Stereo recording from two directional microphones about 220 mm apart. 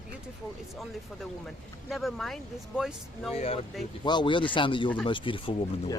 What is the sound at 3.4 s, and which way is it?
Speech, 25° left (ahead or behind).